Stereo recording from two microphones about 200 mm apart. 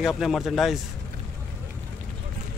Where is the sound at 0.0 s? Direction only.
Centre (ahead or behind).